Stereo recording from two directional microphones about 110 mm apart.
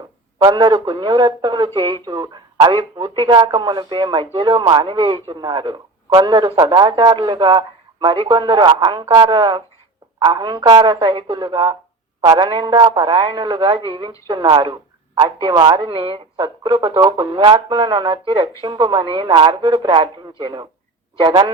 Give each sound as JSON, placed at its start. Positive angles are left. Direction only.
{"t": 0.3, "sound": "a man's voice", "side_deg": -40}